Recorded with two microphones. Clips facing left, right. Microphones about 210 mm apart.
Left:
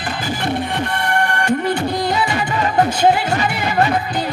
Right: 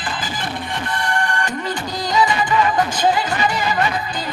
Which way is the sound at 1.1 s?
65° left (ahead or behind).